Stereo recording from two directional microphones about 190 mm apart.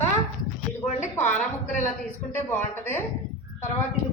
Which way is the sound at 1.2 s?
40° left (ahead or behind).